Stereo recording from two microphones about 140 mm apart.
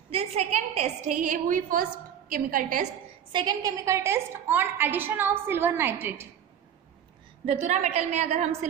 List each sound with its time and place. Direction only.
0.1 s a woman's voice: 45° right (ahead or behind); by 2.9 s 75° right (ahead or behind)
3.3 s a woman's voice: 30° right (ahead or behind); by 6.2 s 15° right (ahead or behind)
7.4 s a woman's voice: 50° right (ahead or behind)